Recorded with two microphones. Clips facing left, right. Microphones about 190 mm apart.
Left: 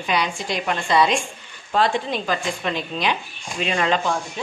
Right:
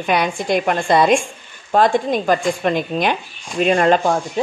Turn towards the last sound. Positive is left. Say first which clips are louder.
# right 7 dB
turn(degrees=-50)  # may be behind; listen again after turning